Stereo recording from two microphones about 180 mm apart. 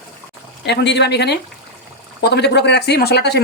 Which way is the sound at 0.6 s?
70° left (ahead or behind).